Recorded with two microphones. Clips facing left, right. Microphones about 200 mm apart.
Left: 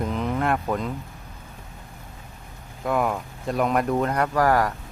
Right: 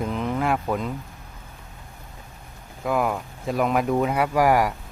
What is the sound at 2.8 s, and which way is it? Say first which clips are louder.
Speech: even; centre (ahead or behind).